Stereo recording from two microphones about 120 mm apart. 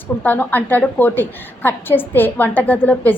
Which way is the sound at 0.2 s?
15° left (ahead or behind).